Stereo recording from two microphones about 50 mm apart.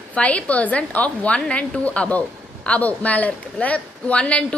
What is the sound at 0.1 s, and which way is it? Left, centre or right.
A woman's voice, left.